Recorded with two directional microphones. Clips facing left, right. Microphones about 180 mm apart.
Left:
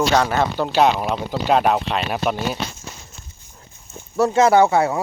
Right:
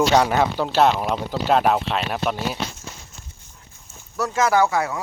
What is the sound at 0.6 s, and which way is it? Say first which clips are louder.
Speech: left 3 dB; centre (ahead or behind).